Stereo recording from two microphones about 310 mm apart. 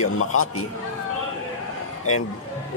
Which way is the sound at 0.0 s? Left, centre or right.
Left.